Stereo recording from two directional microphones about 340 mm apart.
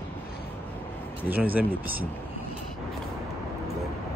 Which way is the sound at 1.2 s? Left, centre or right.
Centre.